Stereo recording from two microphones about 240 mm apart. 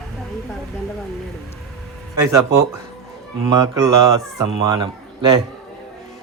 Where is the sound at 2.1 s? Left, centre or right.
Centre.